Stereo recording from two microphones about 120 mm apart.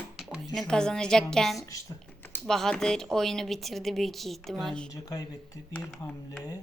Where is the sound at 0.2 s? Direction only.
5° right (ahead or behind).